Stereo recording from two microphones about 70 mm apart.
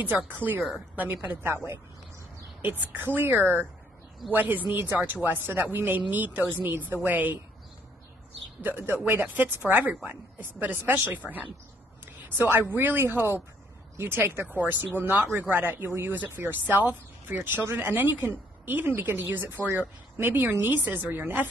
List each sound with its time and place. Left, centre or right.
0.3 s speech: right
1.5 s speech: right
2.6 s speech: right
8.6 s a woman's voice: right